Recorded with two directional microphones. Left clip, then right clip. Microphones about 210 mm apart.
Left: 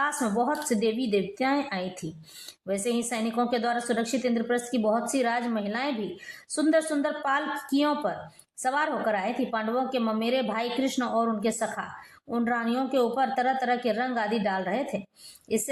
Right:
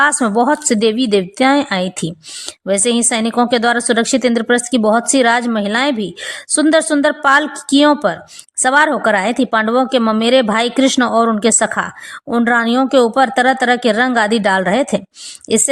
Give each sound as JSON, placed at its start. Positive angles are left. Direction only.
{"t": 0.0, "sound": "a woman's voice", "side_deg": -35}